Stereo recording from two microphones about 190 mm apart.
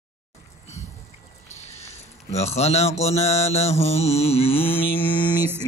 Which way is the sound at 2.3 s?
35° left (ahead or behind).